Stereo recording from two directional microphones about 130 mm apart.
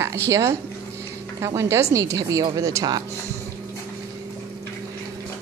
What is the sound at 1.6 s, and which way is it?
Speech, 20° right (ahead or behind).